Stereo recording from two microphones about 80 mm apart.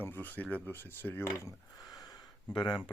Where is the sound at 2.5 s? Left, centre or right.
Left.